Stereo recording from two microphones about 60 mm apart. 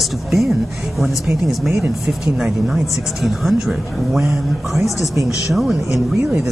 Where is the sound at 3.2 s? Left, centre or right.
Centre.